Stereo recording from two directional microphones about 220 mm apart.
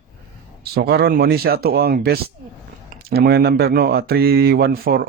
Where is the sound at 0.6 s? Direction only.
45° right (ahead or behind).